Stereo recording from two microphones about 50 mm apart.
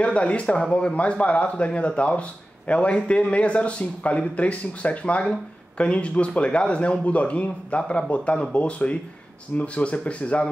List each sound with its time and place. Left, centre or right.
0.0 s speech: left